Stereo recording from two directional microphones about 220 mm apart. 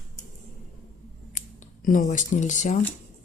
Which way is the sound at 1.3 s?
35° left (ahead or behind).